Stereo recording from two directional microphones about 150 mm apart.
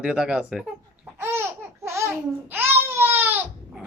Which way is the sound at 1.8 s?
15° right (ahead or behind).